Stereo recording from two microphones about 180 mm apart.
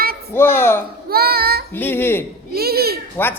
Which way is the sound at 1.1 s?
60° right (ahead or behind).